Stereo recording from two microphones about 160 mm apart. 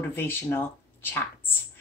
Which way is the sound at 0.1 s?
15° left (ahead or behind).